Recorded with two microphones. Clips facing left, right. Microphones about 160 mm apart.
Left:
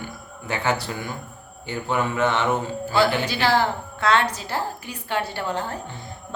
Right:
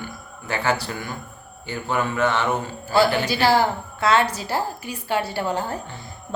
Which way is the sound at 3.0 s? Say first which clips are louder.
Right 2 dB; 10° right (ahead or behind).